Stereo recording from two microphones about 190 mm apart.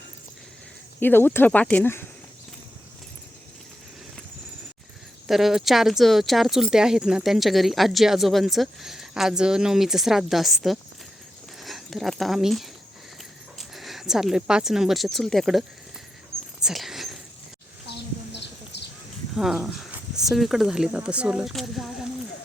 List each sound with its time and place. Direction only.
0.9 s speech: 10° left (ahead or behind)
5.3 s speech: centre (ahead or behind)
16.6 s rodents: centre (ahead or behind)
18.3 s horse: 65° left (ahead or behind)
19.4 s speech: centre (ahead or behind)